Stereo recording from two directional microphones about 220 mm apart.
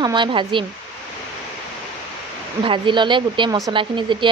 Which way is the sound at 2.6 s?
20° right (ahead or behind).